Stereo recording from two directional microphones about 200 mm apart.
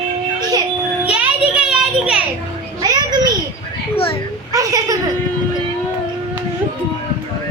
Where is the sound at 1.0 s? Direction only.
5° right (ahead or behind).